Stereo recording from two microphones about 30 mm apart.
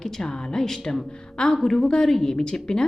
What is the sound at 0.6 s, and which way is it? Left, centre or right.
Speech, centre.